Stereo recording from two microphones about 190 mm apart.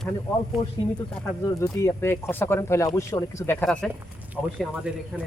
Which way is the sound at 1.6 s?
15° left (ahead or behind).